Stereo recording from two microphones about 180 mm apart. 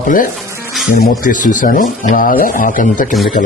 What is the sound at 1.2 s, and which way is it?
Speech, 45° left (ahead or behind).